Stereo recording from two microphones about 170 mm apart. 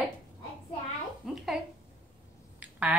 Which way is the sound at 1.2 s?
Centre (ahead or behind).